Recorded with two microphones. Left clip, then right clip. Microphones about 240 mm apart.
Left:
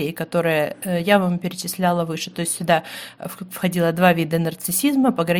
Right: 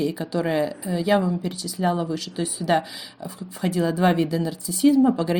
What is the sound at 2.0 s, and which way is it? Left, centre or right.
Speech, left.